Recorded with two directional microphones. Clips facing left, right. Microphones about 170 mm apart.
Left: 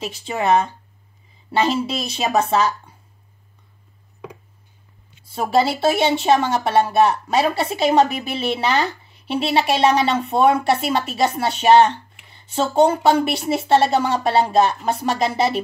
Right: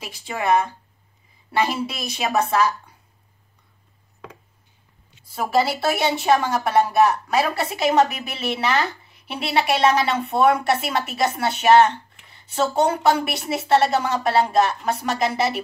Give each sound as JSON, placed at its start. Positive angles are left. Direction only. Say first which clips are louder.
{"t": 0.0, "sound": "speech", "louder": "left 4 dB", "side_deg": 25}
{"t": 5.3, "sound": "speech", "louder": "left 2 dB", "side_deg": 30}